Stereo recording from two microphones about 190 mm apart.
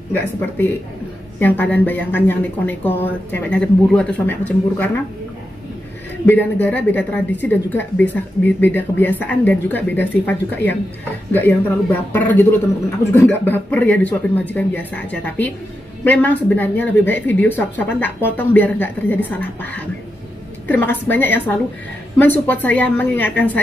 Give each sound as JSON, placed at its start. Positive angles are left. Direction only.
{"t": 0.1, "sound": "a woman's voice", "side_deg": 10}
{"t": 6.2, "sound": "a woman's voice", "side_deg": 10}